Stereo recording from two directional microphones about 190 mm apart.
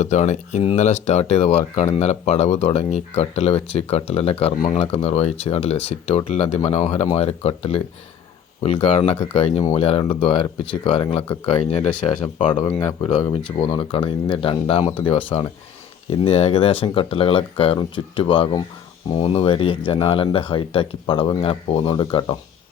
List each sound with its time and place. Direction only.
0.0 s speech: 40° left (ahead or behind)